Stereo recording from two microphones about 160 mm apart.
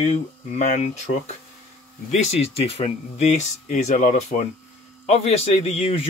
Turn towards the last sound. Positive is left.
turn(degrees=40)  # may be behind; listen again after turning